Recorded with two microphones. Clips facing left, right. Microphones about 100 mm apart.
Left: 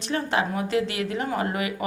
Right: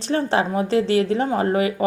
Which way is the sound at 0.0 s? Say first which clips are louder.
Right 5 dB; 35° right (ahead or behind).